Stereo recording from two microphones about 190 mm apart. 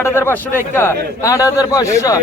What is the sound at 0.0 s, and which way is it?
A man's voice, 15° left (ahead or behind).